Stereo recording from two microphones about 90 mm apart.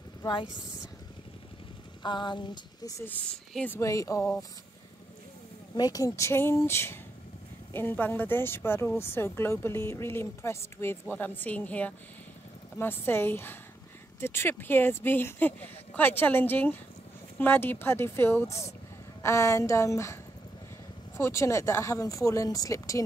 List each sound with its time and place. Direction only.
2.0 s a sound: 55° left (ahead or behind)
3.1 s speech: 15° left (ahead or behind)
3.7 s speech: 35° left (ahead or behind)
5.8 s speech: 45° left (ahead or behind)
21.2 s speech: 30° left (ahead or behind)